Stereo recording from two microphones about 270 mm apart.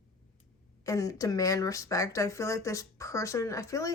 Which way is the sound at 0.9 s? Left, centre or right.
Centre.